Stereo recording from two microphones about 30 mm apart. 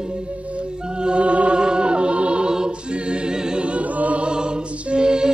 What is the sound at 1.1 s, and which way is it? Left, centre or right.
Music, right.